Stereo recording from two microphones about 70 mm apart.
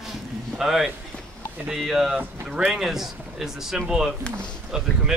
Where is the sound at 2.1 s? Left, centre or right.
Centre.